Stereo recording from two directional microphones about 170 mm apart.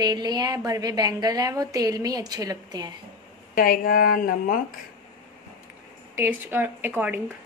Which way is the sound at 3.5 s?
55° left (ahead or behind).